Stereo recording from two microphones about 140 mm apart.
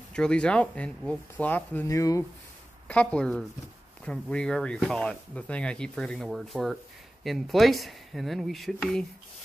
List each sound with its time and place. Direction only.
0.1 s speech: 5° left (ahead or behind)
1.9 s speech: 25° left (ahead or behind)
2.9 s speech: 10° left (ahead or behind)